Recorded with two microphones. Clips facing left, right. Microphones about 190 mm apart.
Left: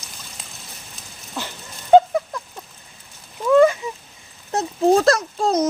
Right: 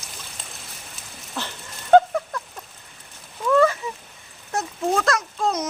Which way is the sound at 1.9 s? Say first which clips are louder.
Left 2 dB; 10° left (ahead or behind).